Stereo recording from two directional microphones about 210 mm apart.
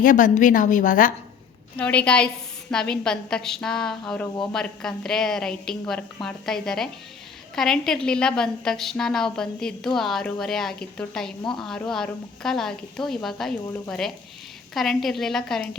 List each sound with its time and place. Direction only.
0.0 s a woman's voice: 40° left (ahead or behind)
1.7 s a woman's voice: 5° left (ahead or behind)